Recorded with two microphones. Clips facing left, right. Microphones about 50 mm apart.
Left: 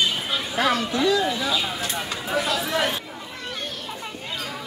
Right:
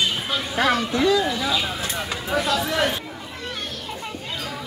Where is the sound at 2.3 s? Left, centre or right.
Centre.